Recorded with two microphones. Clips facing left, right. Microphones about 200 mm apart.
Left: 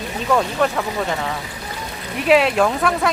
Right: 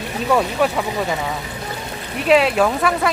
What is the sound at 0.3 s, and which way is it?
Speech, 5° right (ahead or behind).